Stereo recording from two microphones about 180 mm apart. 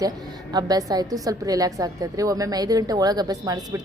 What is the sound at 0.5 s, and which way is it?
A woman's voice, 20° right (ahead or behind).